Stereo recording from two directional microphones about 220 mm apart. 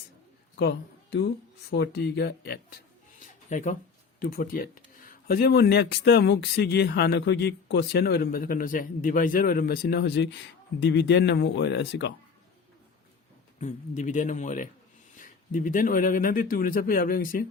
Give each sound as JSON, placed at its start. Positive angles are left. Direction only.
{"t": 0.6, "sound": "speech", "side_deg": 50}
{"t": 3.5, "sound": "speech", "side_deg": 35}
{"t": 13.6, "sound": "speech", "side_deg": 35}